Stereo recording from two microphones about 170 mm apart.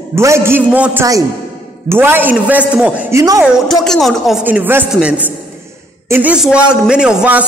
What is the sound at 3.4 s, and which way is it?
Speech, centre (ahead or behind).